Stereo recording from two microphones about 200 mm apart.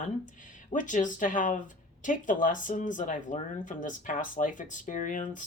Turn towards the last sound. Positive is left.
turn(degrees=40)  # may be behind; listen again after turning